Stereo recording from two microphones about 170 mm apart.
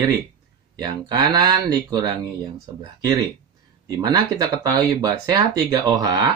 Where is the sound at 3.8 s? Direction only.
20° right (ahead or behind).